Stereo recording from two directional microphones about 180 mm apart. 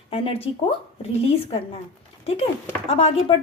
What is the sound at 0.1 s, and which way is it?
A woman's voice, 35° left (ahead or behind).